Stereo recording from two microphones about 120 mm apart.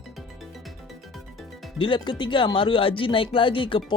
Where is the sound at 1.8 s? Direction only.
40° left (ahead or behind).